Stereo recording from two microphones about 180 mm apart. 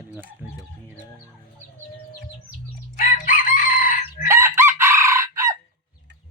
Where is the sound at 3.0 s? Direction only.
50° left (ahead or behind).